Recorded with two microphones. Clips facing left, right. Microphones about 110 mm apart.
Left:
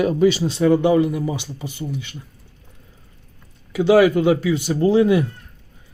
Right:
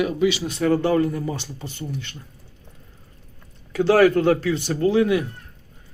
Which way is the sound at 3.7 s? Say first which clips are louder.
Left 2 dB; 10° left (ahead or behind).